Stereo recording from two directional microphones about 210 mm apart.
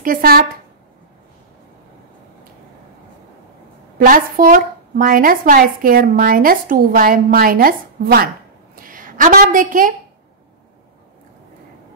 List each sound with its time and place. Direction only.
0.0 s a woman's voice: 45° right (ahead or behind)
4.0 s a woman's voice: 40° right (ahead or behind)